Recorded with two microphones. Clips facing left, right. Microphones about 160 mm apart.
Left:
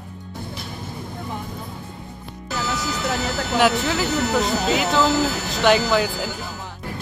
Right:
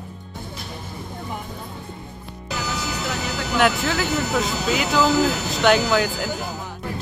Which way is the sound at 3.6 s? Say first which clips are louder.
Left 1 dB; centre (ahead or behind).